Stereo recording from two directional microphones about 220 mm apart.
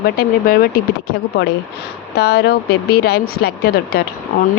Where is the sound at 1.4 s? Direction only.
55° left (ahead or behind).